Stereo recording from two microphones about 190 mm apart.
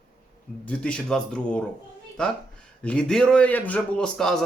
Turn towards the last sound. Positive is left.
turn(degrees=5)  # may be behind; listen again after turning